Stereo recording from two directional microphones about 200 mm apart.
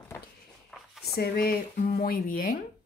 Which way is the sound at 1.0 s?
50° left (ahead or behind).